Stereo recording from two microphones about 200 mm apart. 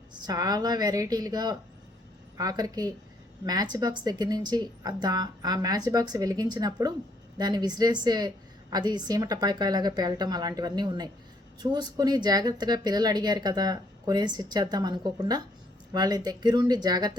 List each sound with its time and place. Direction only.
0.1 s speech: 20° right (ahead or behind)